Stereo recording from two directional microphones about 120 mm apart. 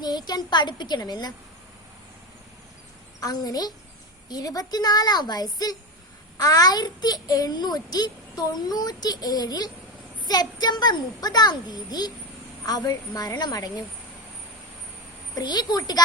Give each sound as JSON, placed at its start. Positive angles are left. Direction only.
{"t": 0.0, "sound": "a child's voice", "side_deg": 35}
{"t": 3.2, "sound": "a child's voice", "side_deg": 30}
{"t": 15.4, "sound": "a child's voice", "side_deg": 35}